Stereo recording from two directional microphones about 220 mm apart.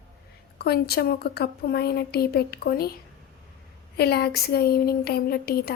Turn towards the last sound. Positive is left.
turn(degrees=45)  # may be behind; listen again after turning